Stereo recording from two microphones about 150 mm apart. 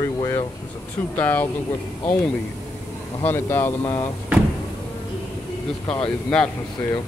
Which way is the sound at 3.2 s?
15° left (ahead or behind).